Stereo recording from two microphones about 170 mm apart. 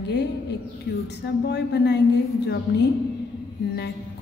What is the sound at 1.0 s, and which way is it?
A woman's voice, 80° left.